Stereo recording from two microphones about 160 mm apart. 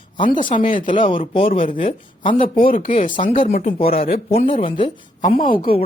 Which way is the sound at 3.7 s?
35° left (ahead or behind).